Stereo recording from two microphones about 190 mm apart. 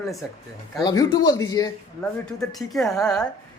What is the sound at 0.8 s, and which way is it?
Speech, 20° left (ahead or behind).